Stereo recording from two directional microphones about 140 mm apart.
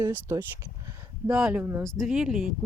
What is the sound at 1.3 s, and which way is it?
Speech, 5° right (ahead or behind).